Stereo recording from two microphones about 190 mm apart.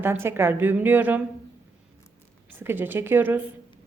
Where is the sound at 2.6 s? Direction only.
10° right (ahead or behind).